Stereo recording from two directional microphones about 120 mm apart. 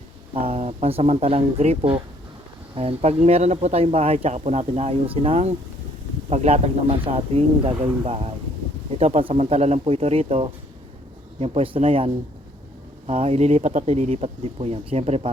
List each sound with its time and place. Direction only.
0.3 s speech: 60° right (ahead or behind)